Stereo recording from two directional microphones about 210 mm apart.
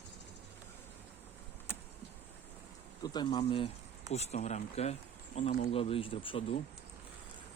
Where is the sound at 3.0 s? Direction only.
20° left (ahead or behind).